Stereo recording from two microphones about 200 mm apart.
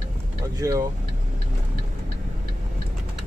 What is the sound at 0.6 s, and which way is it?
Speech, 20° right (ahead or behind).